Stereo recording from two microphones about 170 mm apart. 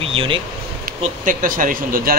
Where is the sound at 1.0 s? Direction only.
50° right (ahead or behind).